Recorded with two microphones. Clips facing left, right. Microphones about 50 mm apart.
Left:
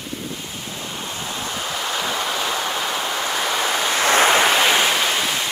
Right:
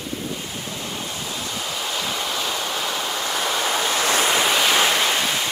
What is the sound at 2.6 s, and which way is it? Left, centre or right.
Waves, centre.